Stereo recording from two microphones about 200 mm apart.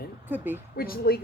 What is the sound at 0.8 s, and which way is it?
Speech, 50° left (ahead or behind).